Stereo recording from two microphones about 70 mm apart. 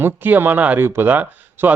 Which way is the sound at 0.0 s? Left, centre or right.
Right.